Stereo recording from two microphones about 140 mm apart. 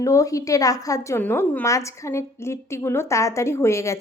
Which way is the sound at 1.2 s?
15° left (ahead or behind).